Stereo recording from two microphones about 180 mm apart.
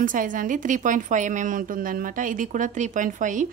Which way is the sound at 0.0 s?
50° right (ahead or behind).